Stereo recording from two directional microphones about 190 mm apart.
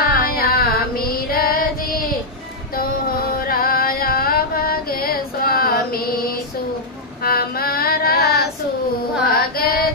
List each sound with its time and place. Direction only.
0.0 s female singing: 50° left (ahead or behind)
3.4 s music: 50° left (ahead or behind)
7.2 s child singing: 50° left (ahead or behind)
9.3 s music: 50° left (ahead or behind)